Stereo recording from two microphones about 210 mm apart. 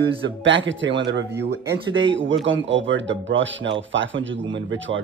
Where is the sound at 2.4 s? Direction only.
65° right (ahead or behind).